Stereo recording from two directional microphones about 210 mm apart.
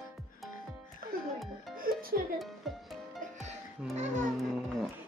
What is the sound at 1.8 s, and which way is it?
Music, 45° right (ahead or behind).